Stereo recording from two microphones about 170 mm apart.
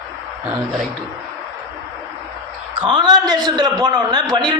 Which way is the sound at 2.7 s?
30° right (ahead or behind).